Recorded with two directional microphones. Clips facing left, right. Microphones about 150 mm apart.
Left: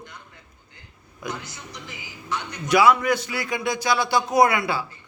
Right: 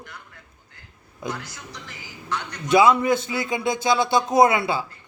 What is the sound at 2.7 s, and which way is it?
A man's voice, 25° right (ahead or behind).